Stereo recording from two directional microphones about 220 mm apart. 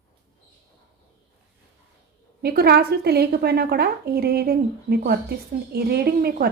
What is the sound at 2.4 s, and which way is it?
A woman's voice, 45° right (ahead or behind).